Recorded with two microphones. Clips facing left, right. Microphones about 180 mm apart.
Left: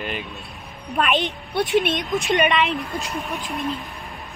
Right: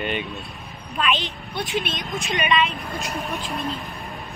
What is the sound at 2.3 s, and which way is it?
Speech, 60° left (ahead or behind).